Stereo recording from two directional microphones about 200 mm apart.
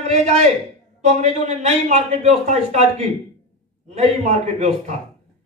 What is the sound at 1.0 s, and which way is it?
A man's voice, 35° right (ahead or behind).